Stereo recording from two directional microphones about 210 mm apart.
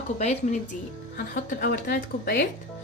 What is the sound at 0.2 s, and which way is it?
A woman's voice, 35° left (ahead or behind).